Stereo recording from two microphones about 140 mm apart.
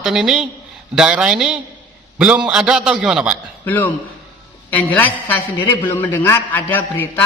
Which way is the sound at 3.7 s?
15° left (ahead or behind).